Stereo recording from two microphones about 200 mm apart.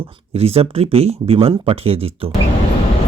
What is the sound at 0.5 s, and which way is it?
Speech, 30° right (ahead or behind).